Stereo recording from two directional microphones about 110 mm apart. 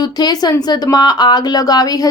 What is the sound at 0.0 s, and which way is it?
A woman's voice, 40° left (ahead or behind).